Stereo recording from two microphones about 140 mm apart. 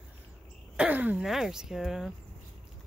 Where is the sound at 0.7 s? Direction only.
10° right (ahead or behind).